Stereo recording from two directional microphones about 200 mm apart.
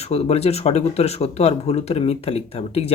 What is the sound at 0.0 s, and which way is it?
Speech, 30° left (ahead or behind).